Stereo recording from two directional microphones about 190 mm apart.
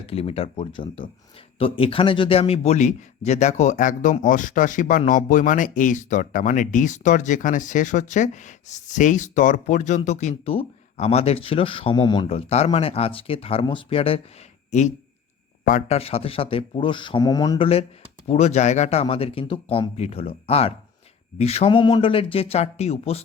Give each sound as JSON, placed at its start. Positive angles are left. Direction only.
{"t": 0.0, "sound": "speech", "side_deg": 30}
{"t": 18.3, "sound": "speech", "side_deg": 35}